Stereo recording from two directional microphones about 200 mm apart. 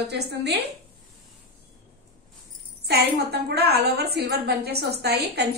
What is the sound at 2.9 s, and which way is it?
A woman's voice, 55° right (ahead or behind).